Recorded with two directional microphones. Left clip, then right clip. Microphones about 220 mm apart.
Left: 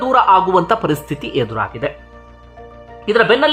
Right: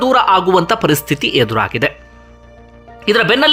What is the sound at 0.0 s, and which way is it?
Speech, 5° right (ahead or behind).